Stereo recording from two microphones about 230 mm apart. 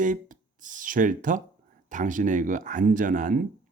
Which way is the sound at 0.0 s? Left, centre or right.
Right.